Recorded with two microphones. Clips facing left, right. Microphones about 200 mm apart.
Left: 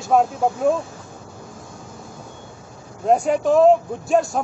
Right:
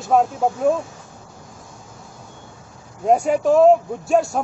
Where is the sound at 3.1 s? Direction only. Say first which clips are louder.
Right 1 dB; centre (ahead or behind).